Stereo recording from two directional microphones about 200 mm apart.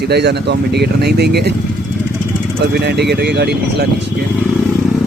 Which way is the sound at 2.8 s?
55° right (ahead or behind).